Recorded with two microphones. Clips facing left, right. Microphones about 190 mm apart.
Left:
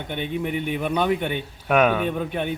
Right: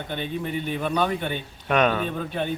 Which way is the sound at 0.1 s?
15° left (ahead or behind).